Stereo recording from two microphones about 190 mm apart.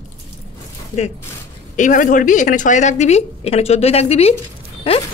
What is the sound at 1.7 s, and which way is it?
A woman's voice, 40° left (ahead or behind).